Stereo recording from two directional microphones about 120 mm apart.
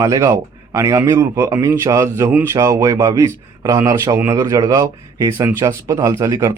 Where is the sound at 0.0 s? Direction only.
30° right (ahead or behind).